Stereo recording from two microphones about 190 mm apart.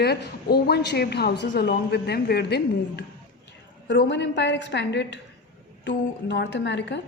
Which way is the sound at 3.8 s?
65° left (ahead or behind).